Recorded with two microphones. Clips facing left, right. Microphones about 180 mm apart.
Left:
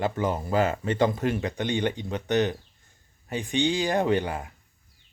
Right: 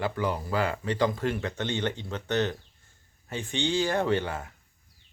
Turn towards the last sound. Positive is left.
turn(degrees=15)  # may be behind; listen again after turning